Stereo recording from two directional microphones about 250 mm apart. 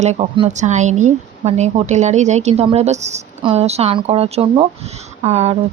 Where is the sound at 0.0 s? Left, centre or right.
Right.